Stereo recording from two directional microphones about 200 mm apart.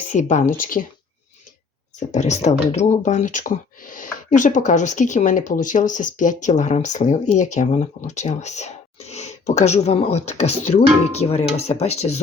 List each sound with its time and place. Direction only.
0.1 s speech: 40° left (ahead or behind)
2.0 s speech: 35° left (ahead or behind)